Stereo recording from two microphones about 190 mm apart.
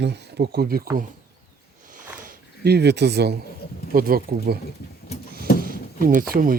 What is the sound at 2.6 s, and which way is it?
Speech, 60° right (ahead or behind).